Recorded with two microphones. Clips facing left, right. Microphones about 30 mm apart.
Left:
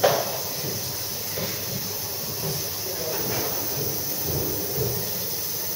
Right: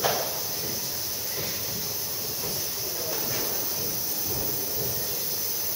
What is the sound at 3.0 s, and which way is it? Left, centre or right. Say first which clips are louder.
Hiss: left 4 dB; centre.